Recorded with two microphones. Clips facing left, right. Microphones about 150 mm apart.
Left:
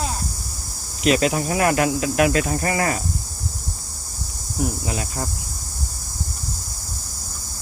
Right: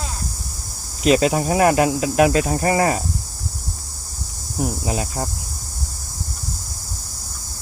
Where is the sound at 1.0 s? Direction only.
30° right (ahead or behind).